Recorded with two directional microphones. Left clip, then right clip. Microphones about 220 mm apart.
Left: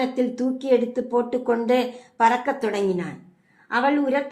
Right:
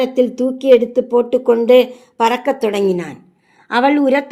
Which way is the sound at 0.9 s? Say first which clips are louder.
Right 9 dB; 30° right (ahead or behind).